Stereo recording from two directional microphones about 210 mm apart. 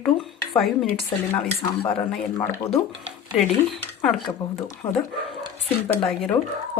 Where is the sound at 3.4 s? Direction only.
Centre (ahead or behind).